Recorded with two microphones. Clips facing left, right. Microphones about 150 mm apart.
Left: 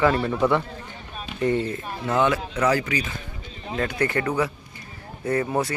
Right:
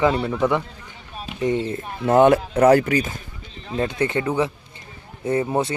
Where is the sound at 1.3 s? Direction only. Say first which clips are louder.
Right 1 dB; 15° right (ahead or behind).